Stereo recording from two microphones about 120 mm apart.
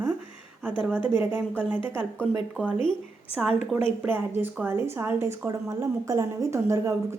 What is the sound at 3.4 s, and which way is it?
Speech, centre (ahead or behind).